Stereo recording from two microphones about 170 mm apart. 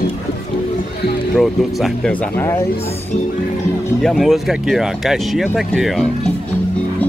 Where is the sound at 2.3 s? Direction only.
15° left (ahead or behind).